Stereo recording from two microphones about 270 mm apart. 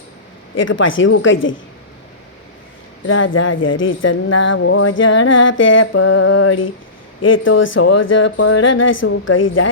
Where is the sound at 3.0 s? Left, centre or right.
Left.